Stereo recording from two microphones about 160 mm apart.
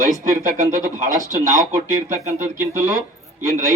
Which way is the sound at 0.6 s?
20° right (ahead or behind).